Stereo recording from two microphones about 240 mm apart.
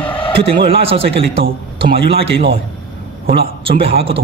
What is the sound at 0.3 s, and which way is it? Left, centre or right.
Speech, right.